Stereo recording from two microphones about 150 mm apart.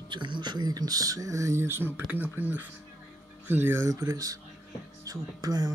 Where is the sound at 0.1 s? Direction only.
30° right (ahead or behind).